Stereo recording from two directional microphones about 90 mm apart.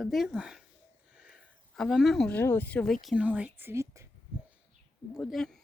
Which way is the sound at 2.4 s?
20° left (ahead or behind).